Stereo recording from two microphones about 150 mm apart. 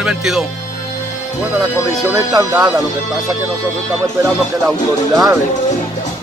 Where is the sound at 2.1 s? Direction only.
20° right (ahead or behind).